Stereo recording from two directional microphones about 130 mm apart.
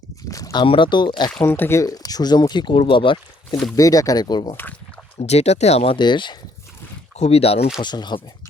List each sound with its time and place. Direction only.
0.3 s a sound: 25° left (ahead or behind)
0.6 s speech: 40° left (ahead or behind)
1.4 s speech: 15° left (ahead or behind); by 3.6 s 40° left (ahead or behind)
3.8 s speech: 25° left (ahead or behind)
5.2 s speech: 55° left (ahead or behind)
6.0 s speech: 35° left (ahead or behind)
7.2 s speech: 50° left (ahead or behind)
7.8 s speech: 35° left (ahead or behind)